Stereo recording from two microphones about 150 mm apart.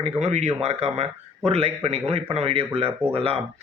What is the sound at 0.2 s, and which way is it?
A man's voice, 45° right (ahead or behind).